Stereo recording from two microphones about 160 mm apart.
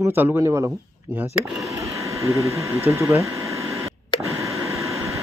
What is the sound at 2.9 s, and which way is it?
Speech, 20° right (ahead or behind).